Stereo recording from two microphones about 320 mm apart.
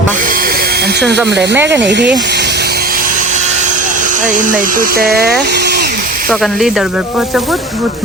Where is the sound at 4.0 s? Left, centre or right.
Right.